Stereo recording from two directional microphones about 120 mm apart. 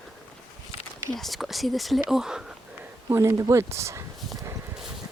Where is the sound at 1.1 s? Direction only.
Centre (ahead or behind).